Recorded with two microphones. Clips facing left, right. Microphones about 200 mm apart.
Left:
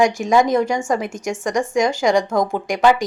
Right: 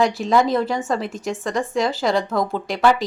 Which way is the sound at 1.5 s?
15° left (ahead or behind).